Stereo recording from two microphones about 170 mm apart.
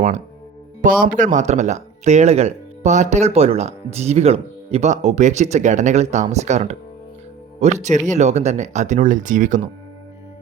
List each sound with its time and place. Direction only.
0.8 s speech: 55° right (ahead or behind)